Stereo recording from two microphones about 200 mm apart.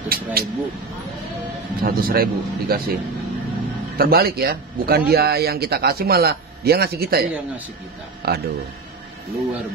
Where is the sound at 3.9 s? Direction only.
50° right (ahead or behind).